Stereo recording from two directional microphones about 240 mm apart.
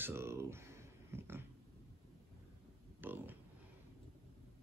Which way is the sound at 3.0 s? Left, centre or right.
Centre.